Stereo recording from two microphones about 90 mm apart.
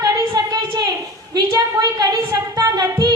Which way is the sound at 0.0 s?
50° right (ahead or behind).